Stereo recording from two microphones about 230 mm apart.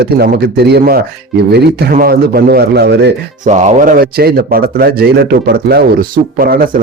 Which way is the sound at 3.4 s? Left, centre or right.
Right.